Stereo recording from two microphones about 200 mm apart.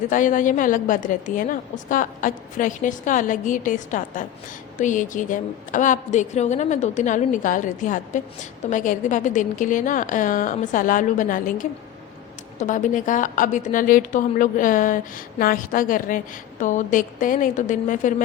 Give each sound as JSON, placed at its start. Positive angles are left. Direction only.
{"t": 0.1, "sound": "a woman's voice", "side_deg": 40}